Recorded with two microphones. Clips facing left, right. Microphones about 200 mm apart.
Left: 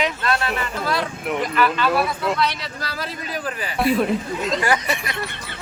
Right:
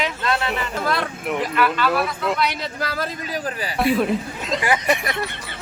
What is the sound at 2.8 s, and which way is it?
Speech, 45° right (ahead or behind).